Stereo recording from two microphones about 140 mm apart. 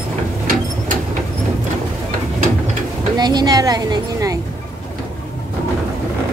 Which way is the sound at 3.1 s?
30° right (ahead or behind).